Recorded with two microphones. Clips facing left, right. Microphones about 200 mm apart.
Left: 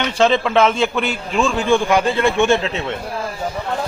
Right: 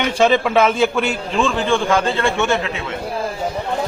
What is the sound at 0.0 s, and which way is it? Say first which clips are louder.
A man's voice: right 1 dB; 10° right (ahead or behind).